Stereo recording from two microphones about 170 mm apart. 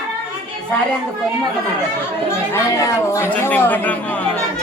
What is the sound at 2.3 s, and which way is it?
Speech, 15° left (ahead or behind).